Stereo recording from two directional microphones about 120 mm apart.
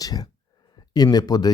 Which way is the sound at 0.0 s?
30° left (ahead or behind).